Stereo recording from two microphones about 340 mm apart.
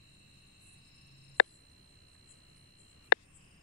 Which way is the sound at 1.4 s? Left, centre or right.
Left.